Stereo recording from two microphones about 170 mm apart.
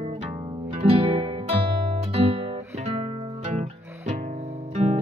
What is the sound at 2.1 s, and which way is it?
Music, 35° right (ahead or behind).